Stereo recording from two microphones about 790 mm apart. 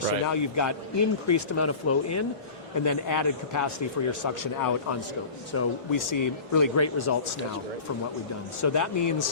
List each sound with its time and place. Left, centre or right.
0.3 s a man's voice: left
8.6 s a man's voice: left